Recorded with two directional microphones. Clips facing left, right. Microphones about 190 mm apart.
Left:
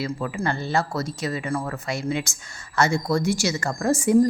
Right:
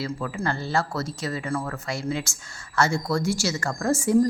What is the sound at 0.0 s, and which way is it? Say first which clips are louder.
Speech: left 2 dB; 15° left (ahead or behind).